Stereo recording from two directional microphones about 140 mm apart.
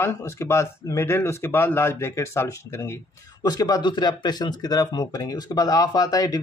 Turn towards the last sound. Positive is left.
turn(degrees=25)  # may be behind; listen again after turning